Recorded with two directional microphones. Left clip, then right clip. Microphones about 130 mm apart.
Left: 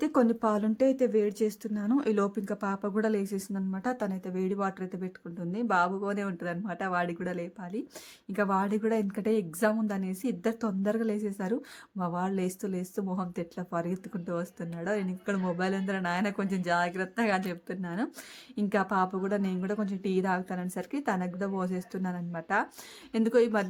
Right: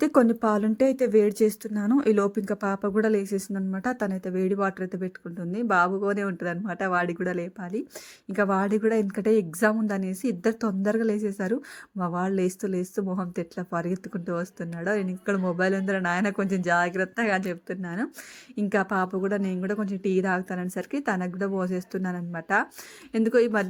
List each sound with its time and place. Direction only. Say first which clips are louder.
0.0 s a woman's voice: right 5 dB; 30° right (ahead or behind)